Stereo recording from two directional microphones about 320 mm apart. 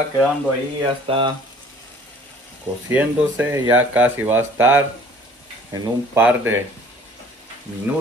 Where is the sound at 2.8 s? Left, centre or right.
Centre.